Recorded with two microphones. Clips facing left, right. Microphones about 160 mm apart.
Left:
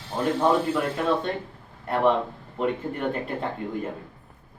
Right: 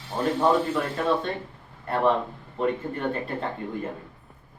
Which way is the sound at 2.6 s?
15° left (ahead or behind).